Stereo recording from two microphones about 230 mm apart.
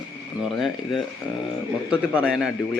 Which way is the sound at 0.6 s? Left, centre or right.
Centre.